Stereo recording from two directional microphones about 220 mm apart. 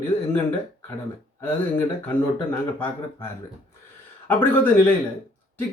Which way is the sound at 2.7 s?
10° left (ahead or behind).